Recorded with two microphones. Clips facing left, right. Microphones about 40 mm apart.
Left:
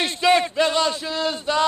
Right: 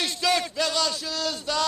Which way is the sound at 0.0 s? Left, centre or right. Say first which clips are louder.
Left 6 dB; left.